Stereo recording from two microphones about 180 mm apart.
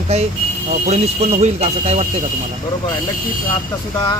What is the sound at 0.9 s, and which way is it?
Speech, 35° right (ahead or behind).